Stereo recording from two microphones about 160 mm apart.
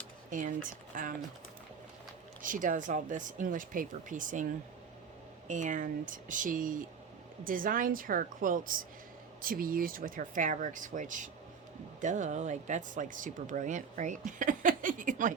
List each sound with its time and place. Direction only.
0.3 s speech: 55° right (ahead or behind)
2.4 s speech: 55° right (ahead or behind)
5.5 s speech: 50° right (ahead or behind)